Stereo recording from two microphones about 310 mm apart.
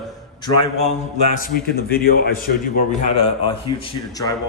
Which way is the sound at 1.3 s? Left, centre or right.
Left.